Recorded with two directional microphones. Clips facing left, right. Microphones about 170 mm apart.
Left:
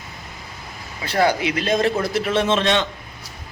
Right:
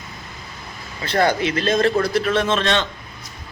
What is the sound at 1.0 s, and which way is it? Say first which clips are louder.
A man's voice: even; 10° left (ahead or behind).